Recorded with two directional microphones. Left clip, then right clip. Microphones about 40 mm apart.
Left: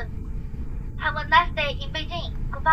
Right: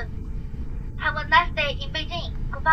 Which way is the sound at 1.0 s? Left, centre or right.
Centre.